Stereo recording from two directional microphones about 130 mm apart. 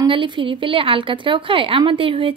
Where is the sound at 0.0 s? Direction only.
40° right (ahead or behind).